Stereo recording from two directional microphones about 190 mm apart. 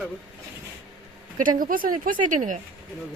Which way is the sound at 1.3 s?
45° right (ahead or behind).